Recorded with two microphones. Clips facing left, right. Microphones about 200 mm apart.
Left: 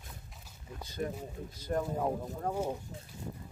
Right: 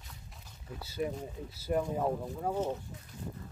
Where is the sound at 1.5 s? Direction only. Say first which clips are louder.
Right 2 dB; 10° right (ahead or behind).